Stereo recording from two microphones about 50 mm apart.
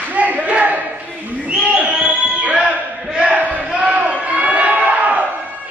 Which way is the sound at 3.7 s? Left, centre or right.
Right.